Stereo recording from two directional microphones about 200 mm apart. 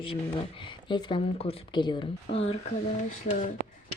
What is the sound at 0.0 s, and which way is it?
Speech, 25° left (ahead or behind).